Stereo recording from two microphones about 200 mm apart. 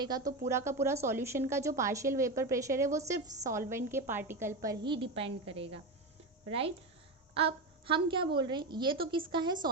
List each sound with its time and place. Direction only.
0.0 s a woman's voice: 20° right (ahead or behind)